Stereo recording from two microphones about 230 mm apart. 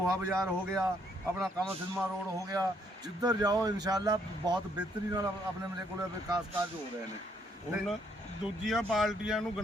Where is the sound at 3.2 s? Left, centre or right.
Centre.